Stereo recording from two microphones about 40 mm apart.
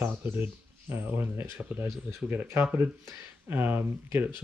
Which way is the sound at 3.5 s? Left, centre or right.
Right.